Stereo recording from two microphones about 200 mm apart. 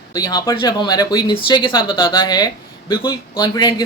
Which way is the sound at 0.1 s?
20° left (ahead or behind).